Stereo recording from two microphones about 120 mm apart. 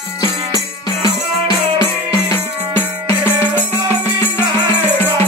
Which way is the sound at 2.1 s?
20° left (ahead or behind).